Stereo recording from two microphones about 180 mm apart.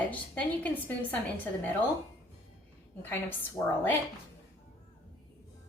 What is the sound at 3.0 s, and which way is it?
Speech, 10° left (ahead or behind).